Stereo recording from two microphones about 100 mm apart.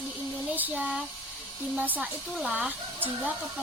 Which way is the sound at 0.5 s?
15° right (ahead or behind).